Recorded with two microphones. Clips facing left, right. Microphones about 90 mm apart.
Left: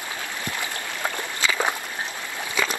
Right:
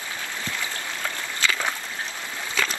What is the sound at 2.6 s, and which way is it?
Splash, 15° left (ahead or behind).